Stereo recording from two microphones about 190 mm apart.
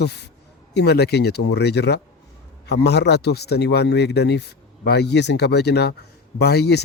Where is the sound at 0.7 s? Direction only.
60° left (ahead or behind).